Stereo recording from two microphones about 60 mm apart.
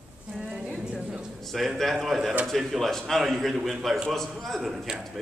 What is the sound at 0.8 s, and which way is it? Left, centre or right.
Speech, centre.